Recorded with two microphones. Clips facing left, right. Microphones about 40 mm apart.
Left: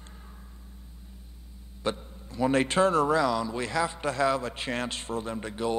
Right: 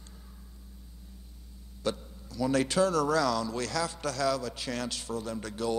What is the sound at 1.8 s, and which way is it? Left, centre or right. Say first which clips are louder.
A man's voice: left 2 dB; left.